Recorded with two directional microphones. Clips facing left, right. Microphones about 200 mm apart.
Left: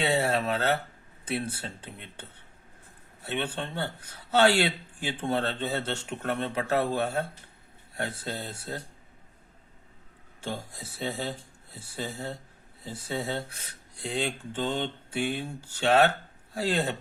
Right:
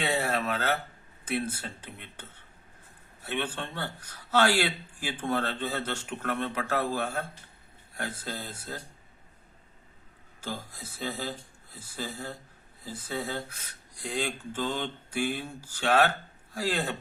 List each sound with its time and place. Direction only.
0.1 s a sound: 25° left (ahead or behind)
1.3 s speech: 25° left (ahead or behind)
3.2 s speech: 20° left (ahead or behind)
11.0 s speech: 25° left (ahead or behind)